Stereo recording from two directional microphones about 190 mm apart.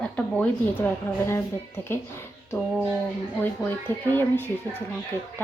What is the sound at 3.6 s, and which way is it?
Speech, 10° left (ahead or behind).